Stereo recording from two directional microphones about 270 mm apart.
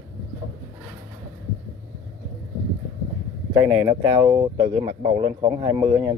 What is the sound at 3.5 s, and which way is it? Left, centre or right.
Speech, centre.